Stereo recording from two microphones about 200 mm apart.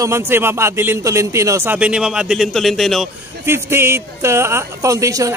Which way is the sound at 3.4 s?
10° right (ahead or behind).